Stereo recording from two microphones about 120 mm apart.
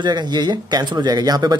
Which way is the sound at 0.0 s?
35° right (ahead or behind).